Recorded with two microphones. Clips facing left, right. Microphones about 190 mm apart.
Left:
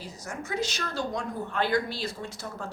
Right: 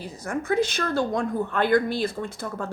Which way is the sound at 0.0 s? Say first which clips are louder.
Right 8 dB; 55° right (ahead or behind).